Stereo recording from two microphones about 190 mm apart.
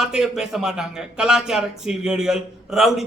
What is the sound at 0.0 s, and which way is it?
A man's voice, 5° right (ahead or behind).